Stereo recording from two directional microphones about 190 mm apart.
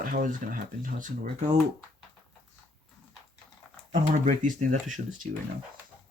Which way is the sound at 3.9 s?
40° right (ahead or behind).